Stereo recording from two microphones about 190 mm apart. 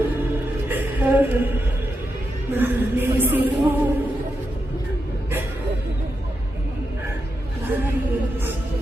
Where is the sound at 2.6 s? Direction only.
10° right (ahead or behind).